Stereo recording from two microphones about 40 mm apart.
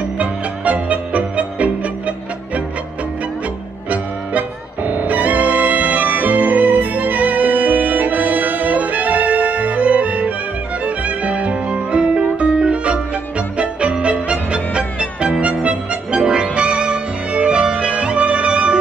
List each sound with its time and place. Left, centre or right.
0.2 s music: right
3.9 s music: right